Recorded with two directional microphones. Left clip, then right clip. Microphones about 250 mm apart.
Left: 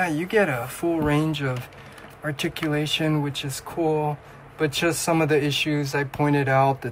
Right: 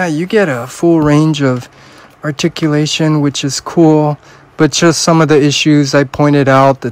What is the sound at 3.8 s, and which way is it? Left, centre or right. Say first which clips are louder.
Speech: right 14 dB; right.